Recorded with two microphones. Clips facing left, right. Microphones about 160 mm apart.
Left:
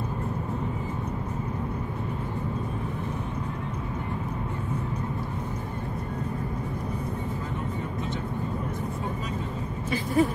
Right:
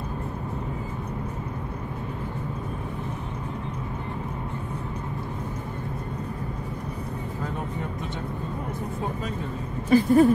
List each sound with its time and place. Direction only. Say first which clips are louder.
9.8 s speech: right 7 dB; 45° right (ahead or behind)